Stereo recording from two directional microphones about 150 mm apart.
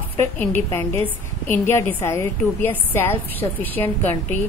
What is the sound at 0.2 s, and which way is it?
A woman's voice, 15° left (ahead or behind).